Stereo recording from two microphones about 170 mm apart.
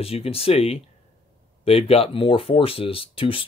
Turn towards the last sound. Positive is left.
turn(degrees=30)  # may be behind; listen again after turning